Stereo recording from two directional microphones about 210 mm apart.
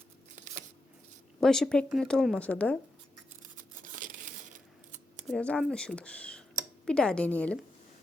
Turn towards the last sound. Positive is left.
turn(degrees=5)  # may be behind; listen again after turning